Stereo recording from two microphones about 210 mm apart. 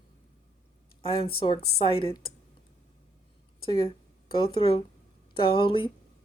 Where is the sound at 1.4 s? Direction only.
25° left (ahead or behind).